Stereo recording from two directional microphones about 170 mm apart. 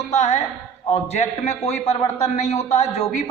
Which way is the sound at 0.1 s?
40° left (ahead or behind).